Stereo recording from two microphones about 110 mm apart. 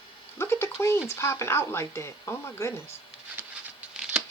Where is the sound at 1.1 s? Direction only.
25° left (ahead or behind).